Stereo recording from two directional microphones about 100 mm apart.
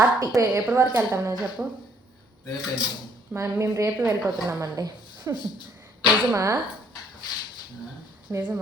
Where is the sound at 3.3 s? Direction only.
30° right (ahead or behind).